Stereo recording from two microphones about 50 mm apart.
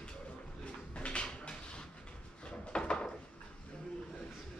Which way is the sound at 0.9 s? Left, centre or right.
Left.